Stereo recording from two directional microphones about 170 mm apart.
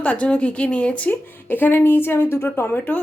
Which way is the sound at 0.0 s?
10° left (ahead or behind).